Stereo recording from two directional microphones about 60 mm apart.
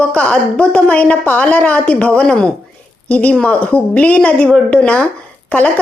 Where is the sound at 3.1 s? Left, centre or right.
Left.